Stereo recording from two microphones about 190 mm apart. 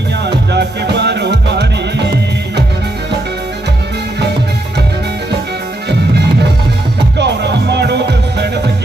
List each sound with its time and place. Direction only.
0.3 s music: 60° right (ahead or behind)
7.2 s music: 60° right (ahead or behind)